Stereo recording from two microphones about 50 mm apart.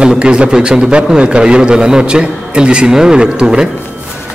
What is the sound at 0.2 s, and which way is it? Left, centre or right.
A man's voice, centre.